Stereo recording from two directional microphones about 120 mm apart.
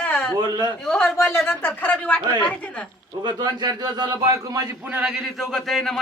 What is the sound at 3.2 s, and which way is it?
A man's voice, 35° right (ahead or behind).